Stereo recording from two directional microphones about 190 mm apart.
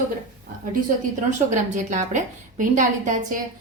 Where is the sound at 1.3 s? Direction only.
40° right (ahead or behind).